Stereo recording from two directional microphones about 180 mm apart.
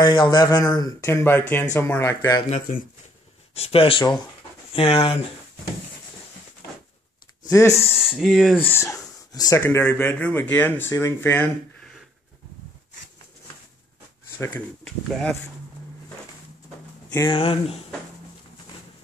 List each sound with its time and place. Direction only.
0.0 s speech: 25° left (ahead or behind)
3.5 s speech: 35° left (ahead or behind)
7.4 s speech: 15° left (ahead or behind)
8.0 s speech: centre (ahead or behind)
8.5 s speech: 10° left (ahead or behind)
14.9 s speech: 5° left (ahead or behind)
17.3 s speech: 30° left (ahead or behind)